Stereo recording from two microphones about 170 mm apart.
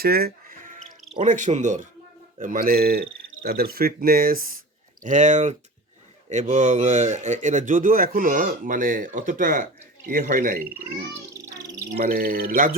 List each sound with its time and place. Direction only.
0.0 s music: 65° right (ahead or behind)
1.2 s speech: 45° right (ahead or behind)
5.0 s speech: 45° right (ahead or behind)
10.7 s speech: 15° right (ahead or behind)
11.9 s speech: 60° right (ahead or behind)